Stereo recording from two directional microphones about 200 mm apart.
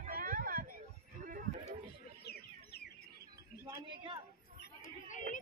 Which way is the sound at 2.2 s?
50° left (ahead or behind).